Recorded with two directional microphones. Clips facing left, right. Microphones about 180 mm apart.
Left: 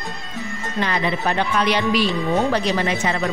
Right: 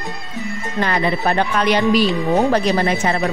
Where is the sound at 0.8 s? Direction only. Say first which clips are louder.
Right 3 dB; 45° right (ahead or behind).